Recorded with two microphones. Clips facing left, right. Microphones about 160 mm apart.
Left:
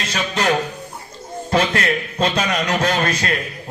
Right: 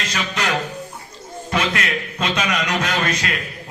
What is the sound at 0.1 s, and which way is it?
Music, 30° left (ahead or behind).